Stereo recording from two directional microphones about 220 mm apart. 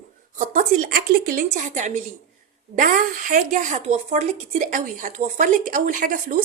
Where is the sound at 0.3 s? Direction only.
35° right (ahead or behind).